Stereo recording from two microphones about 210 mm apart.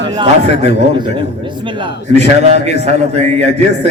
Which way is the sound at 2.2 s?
35° right (ahead or behind).